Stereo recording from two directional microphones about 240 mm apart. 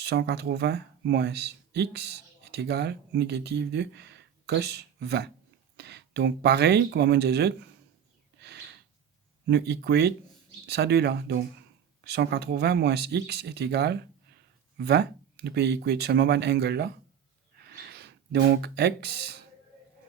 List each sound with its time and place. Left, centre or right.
0.0 s speech: right
8.4 s a sound: right
9.5 s speech: right